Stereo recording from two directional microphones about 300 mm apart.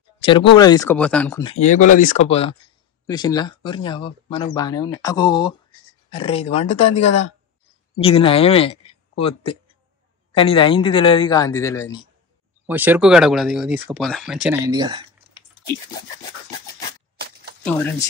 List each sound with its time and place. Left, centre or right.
0.2 s speech: centre
1.4 s speech: left
12.6 s speech: centre